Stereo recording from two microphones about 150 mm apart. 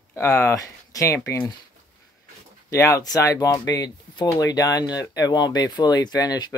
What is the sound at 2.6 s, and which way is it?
Speech, 20° left (ahead or behind).